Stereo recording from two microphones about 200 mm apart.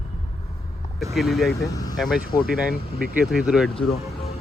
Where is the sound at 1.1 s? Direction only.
Centre (ahead or behind).